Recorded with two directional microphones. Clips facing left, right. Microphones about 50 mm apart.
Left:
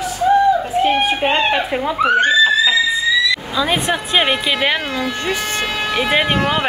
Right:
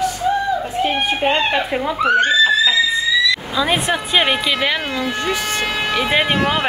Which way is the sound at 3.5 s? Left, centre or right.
Centre.